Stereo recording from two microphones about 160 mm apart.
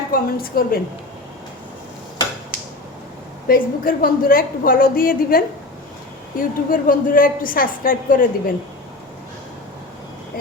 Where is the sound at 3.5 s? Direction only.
65° left (ahead or behind).